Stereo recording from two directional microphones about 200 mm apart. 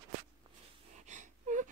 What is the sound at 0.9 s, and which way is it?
Gasp, 35° right (ahead or behind).